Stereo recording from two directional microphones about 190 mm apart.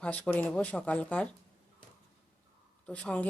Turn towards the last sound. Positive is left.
turn(degrees=5)  # may be behind; listen again after turning